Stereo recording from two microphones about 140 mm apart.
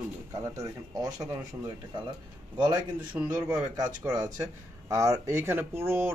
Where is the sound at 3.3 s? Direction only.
25° right (ahead or behind).